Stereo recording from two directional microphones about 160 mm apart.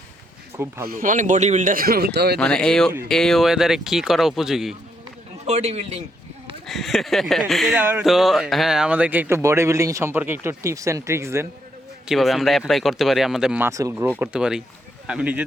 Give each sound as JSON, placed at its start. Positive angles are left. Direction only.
{"t": 0.5, "sound": "speech", "side_deg": -15}
{"t": 0.9, "sound": "speech", "side_deg": -55}
{"t": 2.4, "sound": "speech", "side_deg": 5}
{"t": 5.5, "sound": "a man's voice", "side_deg": -45}
{"t": 6.7, "sound": "speech", "side_deg": 0}
{"t": 7.8, "sound": "speech", "side_deg": -10}
{"t": 8.0, "sound": "speech", "side_deg": 0}
{"t": 12.0, "sound": "speech", "side_deg": 0}
{"t": 14.2, "sound": "speech", "side_deg": -5}